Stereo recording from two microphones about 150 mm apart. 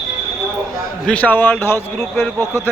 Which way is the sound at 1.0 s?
10° left (ahead or behind).